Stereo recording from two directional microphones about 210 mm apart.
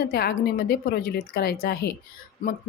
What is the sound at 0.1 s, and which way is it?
Speech, 45° left (ahead or behind).